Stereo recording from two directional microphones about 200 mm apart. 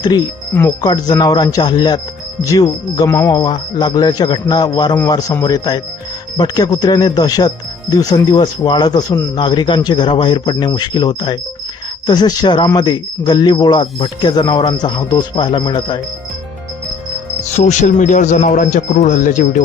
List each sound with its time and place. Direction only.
0.0 s speech: 20° left (ahead or behind)
17.5 s a man's voice: 35° left (ahead or behind)